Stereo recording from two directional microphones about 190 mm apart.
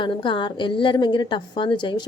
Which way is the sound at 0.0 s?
25° left (ahead or behind).